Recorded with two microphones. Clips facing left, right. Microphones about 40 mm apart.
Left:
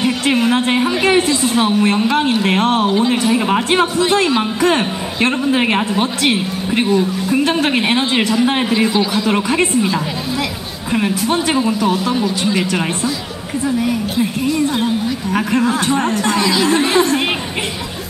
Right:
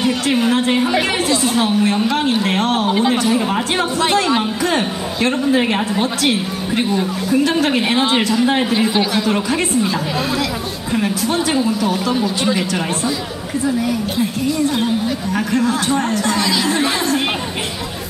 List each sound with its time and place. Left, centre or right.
0.0 s a sound: centre
2.0 s speech: centre
3.2 s a sound: centre
4.4 s a woman's voice: centre
8.7 s speech: centre
9.3 s speech: centre
10.9 s speech: left
15.3 s speech: left
16.4 s speech: centre